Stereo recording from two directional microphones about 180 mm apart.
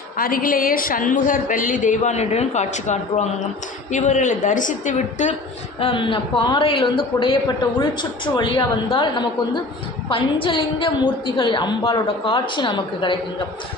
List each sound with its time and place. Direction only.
0.2 s a woman's voice: 50° left (ahead or behind)
5.8 s a woman's voice: 30° left (ahead or behind)